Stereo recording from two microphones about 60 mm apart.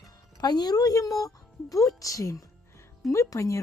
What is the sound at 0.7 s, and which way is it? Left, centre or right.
Speech, left.